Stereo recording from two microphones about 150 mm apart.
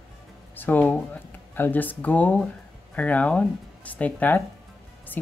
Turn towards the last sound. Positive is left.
turn(degrees=10)  # may be behind; listen again after turning